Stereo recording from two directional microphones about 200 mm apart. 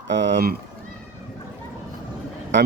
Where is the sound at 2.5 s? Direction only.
65° right (ahead or behind).